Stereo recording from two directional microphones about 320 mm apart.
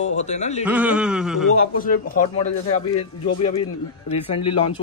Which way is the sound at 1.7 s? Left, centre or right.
Left.